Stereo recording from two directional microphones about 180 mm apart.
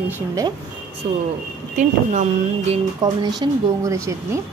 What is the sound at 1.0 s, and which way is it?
Speech, 30° right (ahead or behind).